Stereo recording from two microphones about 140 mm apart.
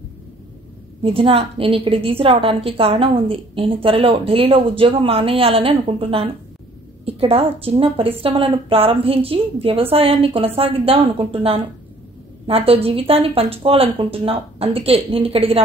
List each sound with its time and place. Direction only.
1.0 s a woman's voice: 40° right (ahead or behind)